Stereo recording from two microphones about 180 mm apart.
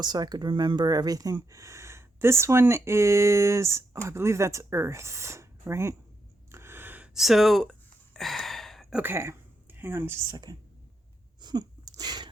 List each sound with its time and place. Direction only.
0.0 s speech: 25° right (ahead or behind)
6.5 s gasp: 15° right (ahead or behind)
11.3 s sneeze: 25° right (ahead or behind)